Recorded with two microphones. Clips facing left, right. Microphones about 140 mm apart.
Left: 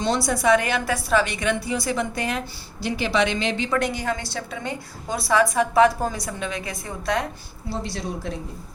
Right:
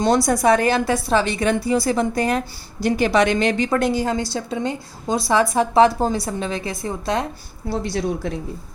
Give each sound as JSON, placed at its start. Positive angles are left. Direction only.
{"t": 0.3, "sound": "a woman's voice", "side_deg": -35}
{"t": 3.8, "sound": "a woman's voice", "side_deg": -30}
{"t": 7.7, "sound": "a woman's voice", "side_deg": -55}